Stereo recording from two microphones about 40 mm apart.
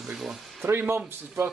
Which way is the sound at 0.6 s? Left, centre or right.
Right.